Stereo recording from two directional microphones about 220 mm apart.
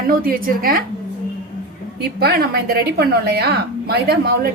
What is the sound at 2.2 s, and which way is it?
A woman's voice, 45° right (ahead or behind).